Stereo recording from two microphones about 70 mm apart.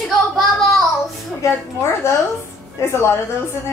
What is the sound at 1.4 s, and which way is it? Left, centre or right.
A woman's voice, left.